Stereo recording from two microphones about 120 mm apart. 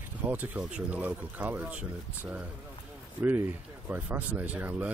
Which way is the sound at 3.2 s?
15° right (ahead or behind).